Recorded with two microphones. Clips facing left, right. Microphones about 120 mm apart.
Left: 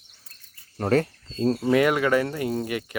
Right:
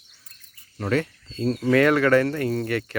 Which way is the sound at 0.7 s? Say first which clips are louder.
Left 2 dB; 40° left (ahead or behind).